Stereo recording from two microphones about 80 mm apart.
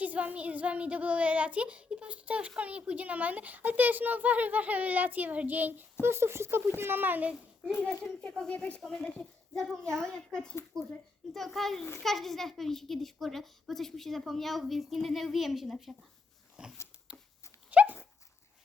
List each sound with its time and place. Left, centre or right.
0.0 s a woman's voice: centre
8.3 s a child's voice: centre
8.8 s a child's voice: centre
10.7 s speech: right
11.3 s a child's voice: centre
17.1 s dog: centre